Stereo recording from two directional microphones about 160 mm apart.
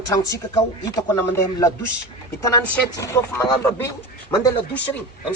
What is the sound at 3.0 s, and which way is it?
Speech, 20° left (ahead or behind).